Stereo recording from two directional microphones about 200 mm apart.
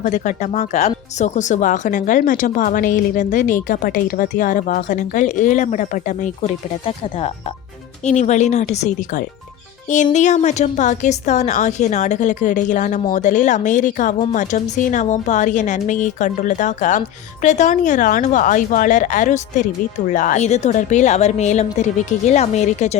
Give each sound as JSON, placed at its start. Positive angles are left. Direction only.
{"t": 0.0, "sound": "speech", "side_deg": 40}